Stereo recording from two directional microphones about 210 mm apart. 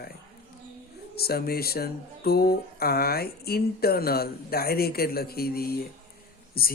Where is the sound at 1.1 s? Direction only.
45° left (ahead or behind).